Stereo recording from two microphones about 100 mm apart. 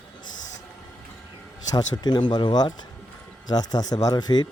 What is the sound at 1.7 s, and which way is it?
Speech, 45° left (ahead or behind).